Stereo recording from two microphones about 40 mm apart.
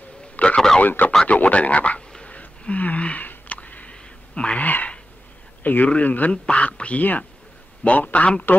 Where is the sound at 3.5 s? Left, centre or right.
Left.